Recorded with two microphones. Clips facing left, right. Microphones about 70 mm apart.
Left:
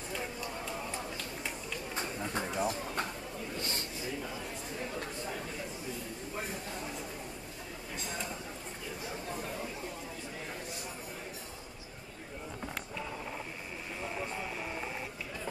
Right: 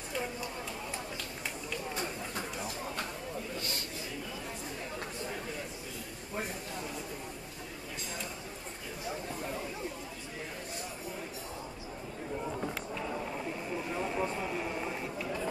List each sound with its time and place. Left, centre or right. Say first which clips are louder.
2.3 s bird: left 5 dB; left